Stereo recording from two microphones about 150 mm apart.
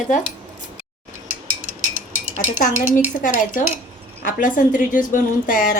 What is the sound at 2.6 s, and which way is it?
Speech, 60° left (ahead or behind).